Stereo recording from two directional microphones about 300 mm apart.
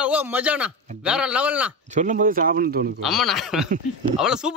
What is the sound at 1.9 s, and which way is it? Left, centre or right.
Speech, right.